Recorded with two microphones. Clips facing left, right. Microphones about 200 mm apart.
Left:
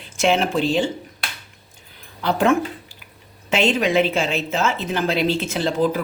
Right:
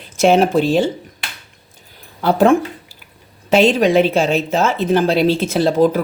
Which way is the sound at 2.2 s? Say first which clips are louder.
Right 5 dB; 40° right (ahead or behind).